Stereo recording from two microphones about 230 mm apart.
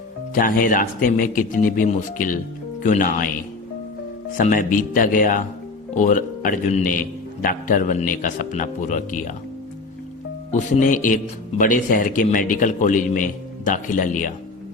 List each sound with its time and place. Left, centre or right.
0.3 s a man's voice: left
4.4 s a man's voice: left
10.5 s a man's voice: left